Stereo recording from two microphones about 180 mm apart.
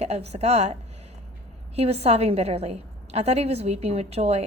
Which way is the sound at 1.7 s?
35° right (ahead or behind).